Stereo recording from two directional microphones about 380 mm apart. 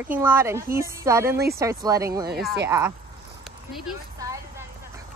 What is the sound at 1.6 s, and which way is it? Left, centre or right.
Speech, centre.